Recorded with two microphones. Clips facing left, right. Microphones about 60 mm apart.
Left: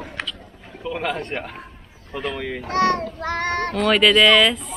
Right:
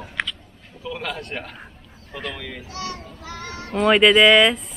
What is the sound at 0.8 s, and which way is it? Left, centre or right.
Speech, centre.